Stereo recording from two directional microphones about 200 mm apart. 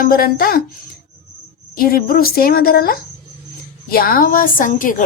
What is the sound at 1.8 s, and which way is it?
A woman's voice, 45° left (ahead or behind).